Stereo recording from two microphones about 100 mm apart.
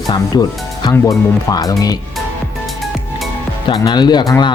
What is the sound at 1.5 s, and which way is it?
Speech, 35° left (ahead or behind).